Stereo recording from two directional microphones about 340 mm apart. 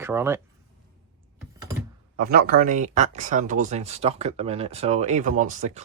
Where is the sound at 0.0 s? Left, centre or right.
Centre.